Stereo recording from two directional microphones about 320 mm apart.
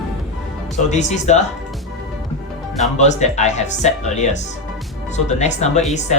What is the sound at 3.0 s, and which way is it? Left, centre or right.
Speech, left.